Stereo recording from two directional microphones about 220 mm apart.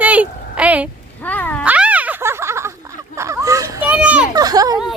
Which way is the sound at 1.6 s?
5° right (ahead or behind).